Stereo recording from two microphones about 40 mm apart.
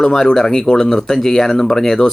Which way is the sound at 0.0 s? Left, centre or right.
Centre.